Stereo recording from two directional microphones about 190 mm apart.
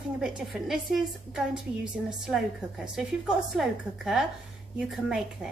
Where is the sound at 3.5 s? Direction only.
Centre (ahead or behind).